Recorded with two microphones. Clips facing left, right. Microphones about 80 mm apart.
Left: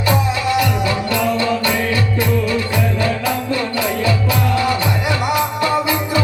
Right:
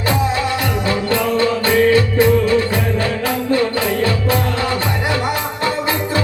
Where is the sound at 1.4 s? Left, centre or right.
Right.